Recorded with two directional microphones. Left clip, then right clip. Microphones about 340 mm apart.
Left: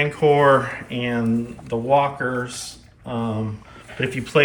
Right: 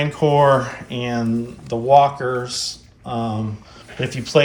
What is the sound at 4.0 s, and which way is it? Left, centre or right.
Speech, centre.